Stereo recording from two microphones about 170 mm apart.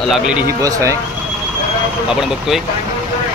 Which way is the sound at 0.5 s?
20° right (ahead or behind).